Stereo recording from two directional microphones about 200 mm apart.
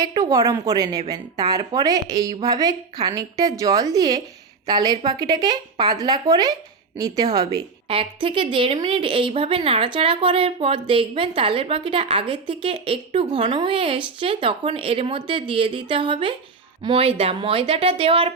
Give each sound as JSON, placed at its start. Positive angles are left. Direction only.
{"t": 0.0, "sound": "a woman's voice", "side_deg": -20}